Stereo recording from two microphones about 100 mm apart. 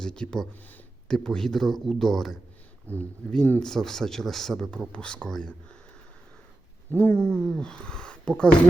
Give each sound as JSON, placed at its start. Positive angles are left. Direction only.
{"t": 0.0, "sound": "speech", "side_deg": 10}
{"t": 6.9, "sound": "speech", "side_deg": 15}